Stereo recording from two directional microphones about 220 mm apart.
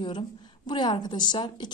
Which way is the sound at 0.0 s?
20° left (ahead or behind).